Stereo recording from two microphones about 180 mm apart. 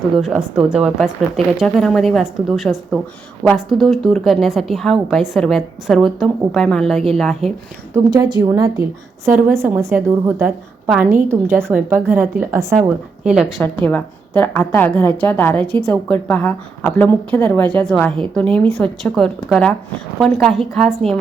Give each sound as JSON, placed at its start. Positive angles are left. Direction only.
{"t": 0.2, "sound": "a woman's voice", "side_deg": 0}
{"t": 8.1, "sound": "a woman's voice", "side_deg": -20}
{"t": 13.2, "sound": "a woman's voice", "side_deg": -5}
{"t": 13.6, "sound": "a woman's voice", "side_deg": 10}